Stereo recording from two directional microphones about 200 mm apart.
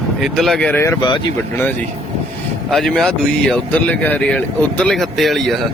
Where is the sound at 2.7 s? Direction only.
Centre (ahead or behind).